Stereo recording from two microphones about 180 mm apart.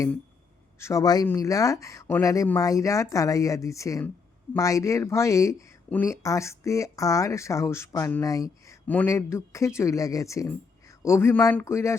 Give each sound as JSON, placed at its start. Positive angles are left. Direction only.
{"t": 0.8, "sound": "speech", "side_deg": 15}